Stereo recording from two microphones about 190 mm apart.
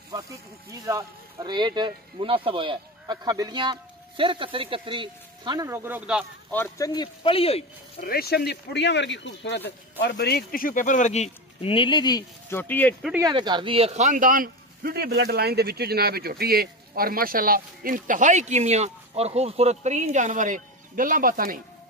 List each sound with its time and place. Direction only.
0.8 s speech: 20° right (ahead or behind)
5.7 s speech: 10° right (ahead or behind)
6.5 s speech: 15° left (ahead or behind); by 7.6 s 30° left (ahead or behind)
8.0 s speech: 55° left (ahead or behind); by 12.9 s 10° left (ahead or behind)
13.2 s speech: 20° right (ahead or behind); by 21.5 s 45° right (ahead or behind)